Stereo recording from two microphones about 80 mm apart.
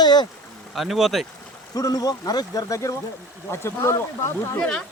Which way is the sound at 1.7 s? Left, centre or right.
Left.